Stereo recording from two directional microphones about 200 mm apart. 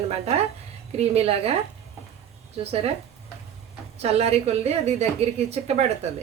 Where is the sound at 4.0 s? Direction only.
30° right (ahead or behind).